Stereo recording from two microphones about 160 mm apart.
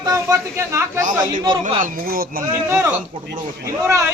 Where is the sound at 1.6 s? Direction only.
60° right (ahead or behind).